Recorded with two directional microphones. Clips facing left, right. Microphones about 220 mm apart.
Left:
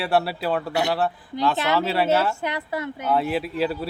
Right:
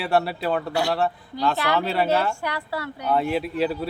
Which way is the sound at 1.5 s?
20° left (ahead or behind).